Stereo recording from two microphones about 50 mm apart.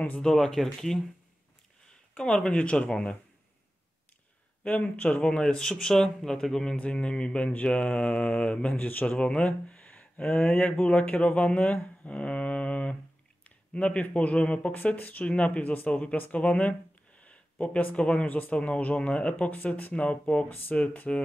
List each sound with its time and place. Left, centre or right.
0.2 s speech: centre
2.1 s speech: centre
2.5 s mantra: left
2.9 s speech: centre
4.6 s speech: left; by 6.8 s centre
6.8 s mantra: left
8.7 s a man's voice: left
9.1 s speech: left
14.7 s mantra: left
17.2 s a sound: left
18.2 s a man's voice: left
18.6 s mantra: left
19.9 s mantra: left
20.4 s a man's voice: left